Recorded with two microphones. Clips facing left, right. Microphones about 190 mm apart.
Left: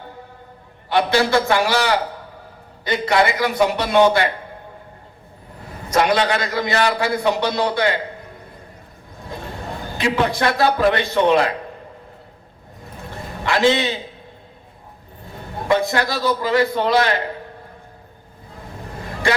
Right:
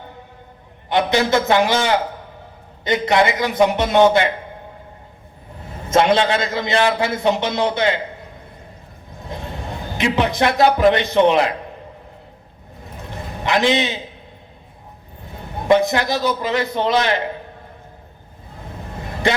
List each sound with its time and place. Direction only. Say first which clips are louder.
0.9 s a man's voice: even; 20° right (ahead or behind)
5.9 s a man's voice: right 2 dB; 25° right (ahead or behind)
9.3 s a sound: right 1 dB; 20° right (ahead or behind)
10.0 s a man's voice: right 1 dB; 20° right (ahead or behind)
13.1 s a sound: right 1 dB; 20° right (ahead or behind)
15.6 s a man's voice: right 3 dB; 20° right (ahead or behind)